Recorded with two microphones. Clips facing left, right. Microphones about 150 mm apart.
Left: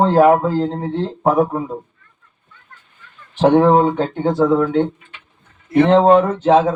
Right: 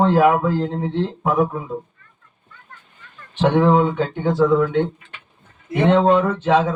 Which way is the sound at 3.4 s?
40° left (ahead or behind).